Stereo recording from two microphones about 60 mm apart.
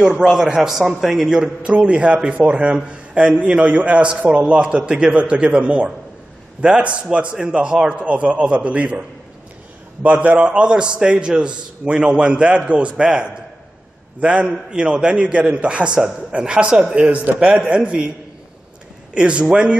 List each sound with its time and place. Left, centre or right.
0.0 s a man's voice: centre
10.0 s a man's voice: right
19.1 s a man's voice: centre